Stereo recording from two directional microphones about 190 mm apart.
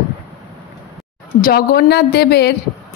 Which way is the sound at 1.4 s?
50° left (ahead or behind).